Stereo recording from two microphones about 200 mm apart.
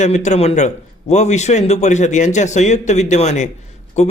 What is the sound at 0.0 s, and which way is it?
A man's voice, 35° left (ahead or behind).